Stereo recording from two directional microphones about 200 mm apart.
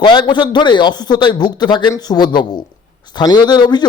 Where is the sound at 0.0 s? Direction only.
20° left (ahead or behind).